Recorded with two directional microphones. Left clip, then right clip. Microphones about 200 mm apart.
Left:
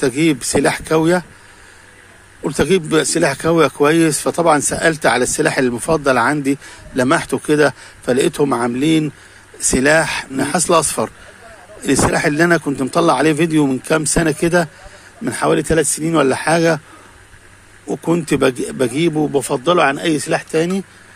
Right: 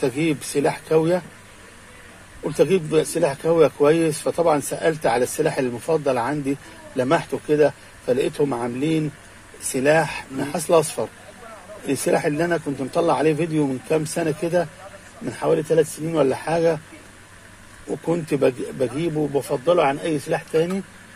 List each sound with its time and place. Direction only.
0.0 s speech: 30° left (ahead or behind)
2.4 s speech: 30° left (ahead or behind)
17.8 s speech: 30° left (ahead or behind)